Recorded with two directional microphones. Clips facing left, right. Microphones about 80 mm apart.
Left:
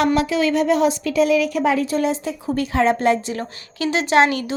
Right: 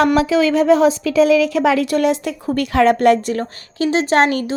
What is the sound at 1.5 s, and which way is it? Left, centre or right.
A woman's voice, right.